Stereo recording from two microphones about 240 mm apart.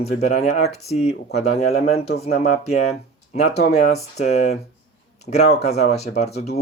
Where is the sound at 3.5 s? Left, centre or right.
Left.